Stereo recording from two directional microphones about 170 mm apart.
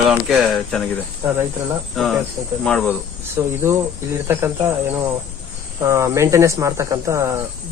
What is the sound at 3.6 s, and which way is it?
Speech, 15° right (ahead or behind).